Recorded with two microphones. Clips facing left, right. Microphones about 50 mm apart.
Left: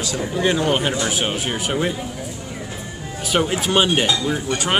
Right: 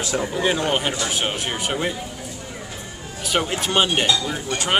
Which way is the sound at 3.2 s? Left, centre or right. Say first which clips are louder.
Left 3 dB; centre.